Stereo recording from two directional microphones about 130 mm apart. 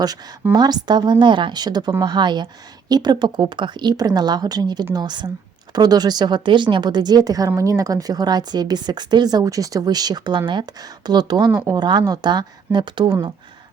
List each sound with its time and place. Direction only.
0.0 s a woman's voice: 30° right (ahead or behind)